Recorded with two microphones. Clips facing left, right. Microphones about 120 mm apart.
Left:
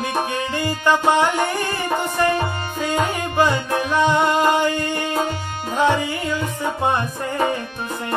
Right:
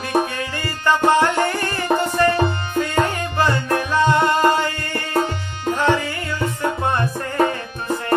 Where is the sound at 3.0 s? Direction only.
15° left (ahead or behind).